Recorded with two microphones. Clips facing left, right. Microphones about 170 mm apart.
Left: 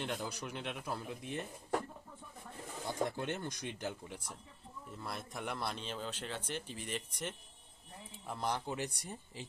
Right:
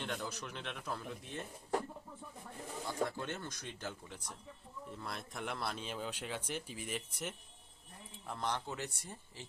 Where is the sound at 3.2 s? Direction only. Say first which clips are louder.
Left 3 dB; 15° left (ahead or behind); by 7.3 s 5° right (ahead or behind).